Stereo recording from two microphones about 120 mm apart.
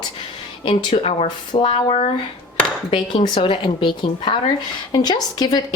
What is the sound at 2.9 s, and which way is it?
A woman's voice, 40° left (ahead or behind).